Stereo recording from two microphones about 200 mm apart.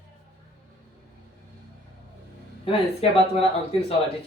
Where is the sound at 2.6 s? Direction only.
30° left (ahead or behind).